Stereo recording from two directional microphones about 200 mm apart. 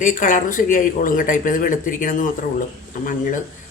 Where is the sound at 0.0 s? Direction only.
40° left (ahead or behind).